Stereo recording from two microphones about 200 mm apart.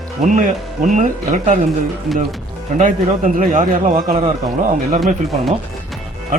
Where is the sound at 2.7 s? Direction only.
40° right (ahead or behind).